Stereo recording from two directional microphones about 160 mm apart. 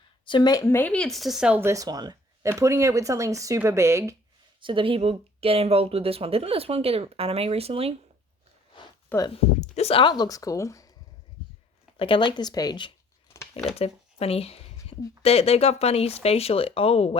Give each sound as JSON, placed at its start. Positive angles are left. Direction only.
{"t": 0.3, "sound": "speech", "side_deg": 25}
{"t": 4.6, "sound": "speech", "side_deg": -30}
{"t": 9.1, "sound": "speech", "side_deg": 10}
{"t": 9.6, "sound": "speech", "side_deg": 40}
{"t": 11.9, "sound": "speech", "side_deg": 35}
{"t": 13.7, "sound": "a sound", "side_deg": 40}
{"t": 15.2, "sound": "speech", "side_deg": 40}